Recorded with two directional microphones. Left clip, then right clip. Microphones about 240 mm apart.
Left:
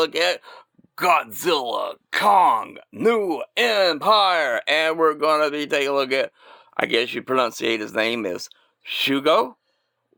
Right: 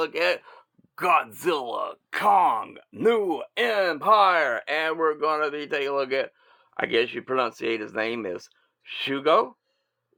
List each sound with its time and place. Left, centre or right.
0.0 s speech: left